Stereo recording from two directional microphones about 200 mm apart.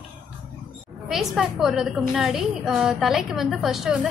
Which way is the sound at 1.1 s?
Centre (ahead or behind).